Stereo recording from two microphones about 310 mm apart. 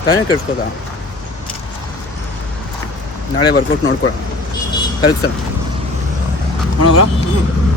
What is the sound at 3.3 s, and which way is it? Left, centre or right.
Speech, left.